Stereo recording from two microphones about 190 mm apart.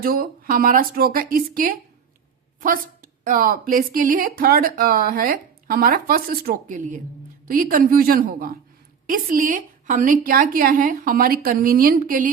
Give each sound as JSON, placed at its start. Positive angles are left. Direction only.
{"t": 0.0, "sound": "speech", "side_deg": -50}